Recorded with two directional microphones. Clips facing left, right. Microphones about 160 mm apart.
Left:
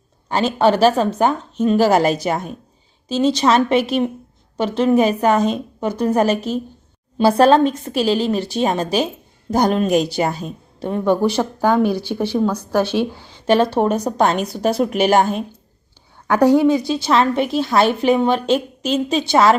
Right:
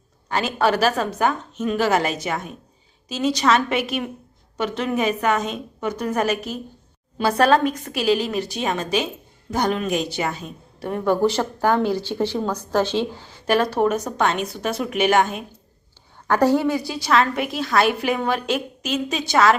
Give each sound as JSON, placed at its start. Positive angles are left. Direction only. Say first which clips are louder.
{"t": 0.3, "sound": "a woman's voice", "louder": "left 5 dB", "side_deg": 30}
{"t": 10.8, "sound": "speech", "louder": "left 3 dB", "side_deg": 20}
{"t": 13.5, "sound": "a woman's voice", "louder": "left 4 dB", "side_deg": 25}
{"t": 16.2, "sound": "a woman's voice", "louder": "left 5 dB", "side_deg": 15}